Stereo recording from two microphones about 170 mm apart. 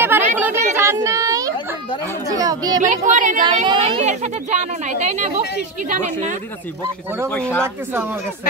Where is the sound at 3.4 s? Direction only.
25° right (ahead or behind).